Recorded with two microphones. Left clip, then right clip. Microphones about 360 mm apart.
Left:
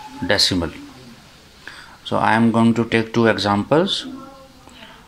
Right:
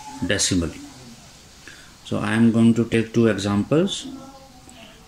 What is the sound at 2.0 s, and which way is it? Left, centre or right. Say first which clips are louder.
Speech: left 5 dB; centre.